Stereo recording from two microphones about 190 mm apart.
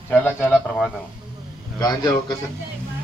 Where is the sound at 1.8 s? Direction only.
20° left (ahead or behind).